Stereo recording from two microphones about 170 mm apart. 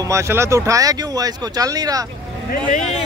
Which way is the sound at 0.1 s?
15° right (ahead or behind).